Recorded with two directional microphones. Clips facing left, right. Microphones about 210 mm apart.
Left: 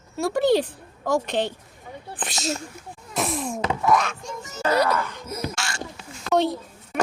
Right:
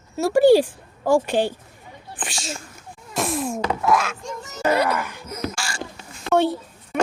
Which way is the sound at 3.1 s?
Centre (ahead or behind).